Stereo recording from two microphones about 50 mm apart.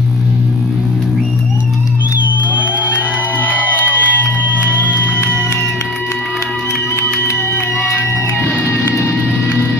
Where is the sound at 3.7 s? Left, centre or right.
Right.